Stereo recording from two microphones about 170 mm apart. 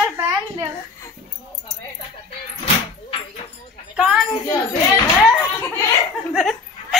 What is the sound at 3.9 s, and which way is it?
Speech, 5° right (ahead or behind).